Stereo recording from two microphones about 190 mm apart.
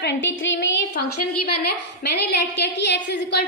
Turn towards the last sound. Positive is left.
turn(degrees=65)  # may be behind; listen again after turning